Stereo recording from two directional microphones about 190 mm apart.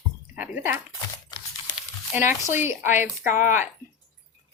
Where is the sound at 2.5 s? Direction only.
10° right (ahead or behind).